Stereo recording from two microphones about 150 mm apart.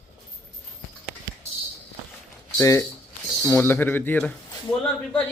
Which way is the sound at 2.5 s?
20° left (ahead or behind).